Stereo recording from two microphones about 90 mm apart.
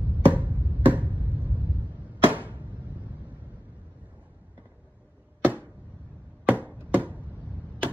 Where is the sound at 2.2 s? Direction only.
20° right (ahead or behind).